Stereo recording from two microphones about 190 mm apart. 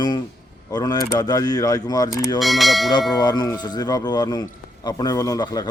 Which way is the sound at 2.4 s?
Centre (ahead or behind).